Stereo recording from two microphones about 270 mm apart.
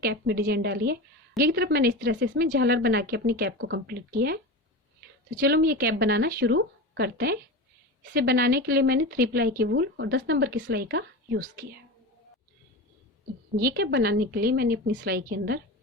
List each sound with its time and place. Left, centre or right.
0.0 s speech: right
13.6 s speech: right